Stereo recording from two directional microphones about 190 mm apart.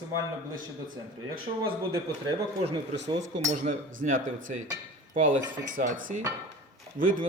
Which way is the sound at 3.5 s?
40° right (ahead or behind).